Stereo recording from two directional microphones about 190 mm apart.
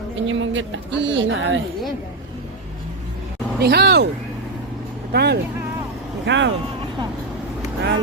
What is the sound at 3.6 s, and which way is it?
Speech, 60° right (ahead or behind).